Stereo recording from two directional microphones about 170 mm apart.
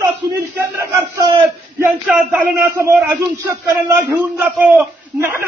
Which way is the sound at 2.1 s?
5° right (ahead or behind).